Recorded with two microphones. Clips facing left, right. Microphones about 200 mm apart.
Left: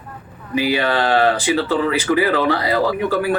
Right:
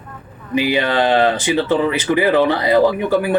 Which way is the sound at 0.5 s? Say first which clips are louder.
Right 2 dB; 20° right (ahead or behind).